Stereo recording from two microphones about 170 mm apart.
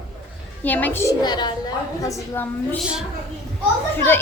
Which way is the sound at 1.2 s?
25° left (ahead or behind).